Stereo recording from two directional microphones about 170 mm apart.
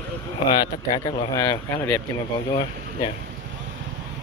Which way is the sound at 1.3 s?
15° left (ahead or behind).